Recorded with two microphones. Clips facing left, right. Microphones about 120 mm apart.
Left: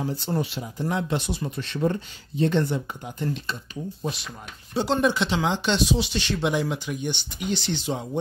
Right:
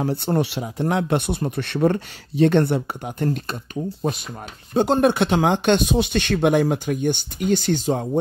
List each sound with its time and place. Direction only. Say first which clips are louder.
0.0 s speech: right 6 dB; 60° right (ahead or behind)
4.7 s speech: right 5 dB; 50° right (ahead or behind)